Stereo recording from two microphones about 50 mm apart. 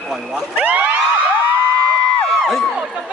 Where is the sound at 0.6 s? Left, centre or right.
Right.